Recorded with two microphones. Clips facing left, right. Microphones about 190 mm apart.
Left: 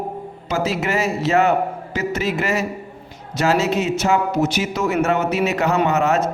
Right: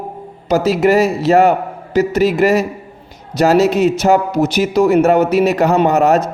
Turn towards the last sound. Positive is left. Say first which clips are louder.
# right 6 dB
turn(degrees=-35)  # may be behind; listen again after turning